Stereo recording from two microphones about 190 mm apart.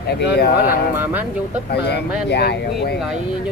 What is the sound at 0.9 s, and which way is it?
Speech, 10° right (ahead or behind).